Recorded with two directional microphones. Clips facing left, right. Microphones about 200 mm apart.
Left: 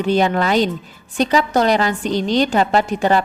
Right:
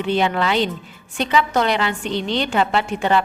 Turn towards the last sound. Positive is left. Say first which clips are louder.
# left 3 dB
turn(degrees=40)  # may be behind; listen again after turning